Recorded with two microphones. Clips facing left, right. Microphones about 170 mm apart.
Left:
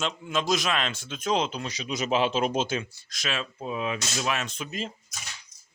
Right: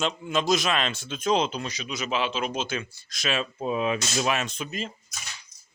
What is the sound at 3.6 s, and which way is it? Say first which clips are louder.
Speech: right 5 dB; 30° right (ahead or behind).